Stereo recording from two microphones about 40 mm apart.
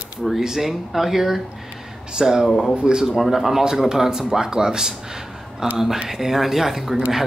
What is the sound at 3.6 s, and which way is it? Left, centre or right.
Speech, centre.